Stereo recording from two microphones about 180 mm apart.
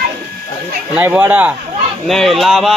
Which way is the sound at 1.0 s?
10° right (ahead or behind).